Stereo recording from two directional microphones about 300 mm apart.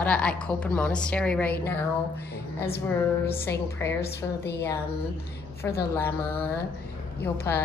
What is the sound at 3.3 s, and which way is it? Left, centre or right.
Speech, centre.